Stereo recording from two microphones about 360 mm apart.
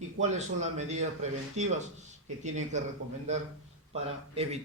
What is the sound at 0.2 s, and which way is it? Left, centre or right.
Speech, centre.